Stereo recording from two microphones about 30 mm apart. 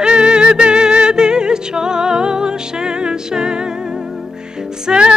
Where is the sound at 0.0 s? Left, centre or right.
Right.